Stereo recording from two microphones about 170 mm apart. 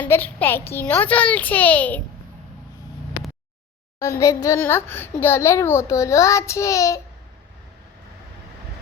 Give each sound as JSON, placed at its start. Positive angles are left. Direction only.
{"t": 0.0, "sound": "a child's voice", "side_deg": 10}
{"t": 4.0, "sound": "a child's voice", "side_deg": 15}